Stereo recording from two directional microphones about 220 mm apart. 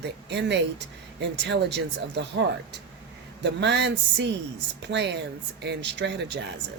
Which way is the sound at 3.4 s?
50° right (ahead or behind).